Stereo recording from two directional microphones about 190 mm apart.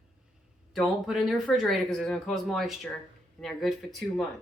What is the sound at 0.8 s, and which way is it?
Speech, centre (ahead or behind).